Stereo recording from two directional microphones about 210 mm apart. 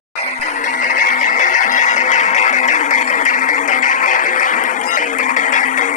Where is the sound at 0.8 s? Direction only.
40° left (ahead or behind).